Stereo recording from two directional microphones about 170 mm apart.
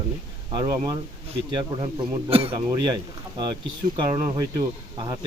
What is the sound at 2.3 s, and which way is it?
Speech, 35° right (ahead or behind).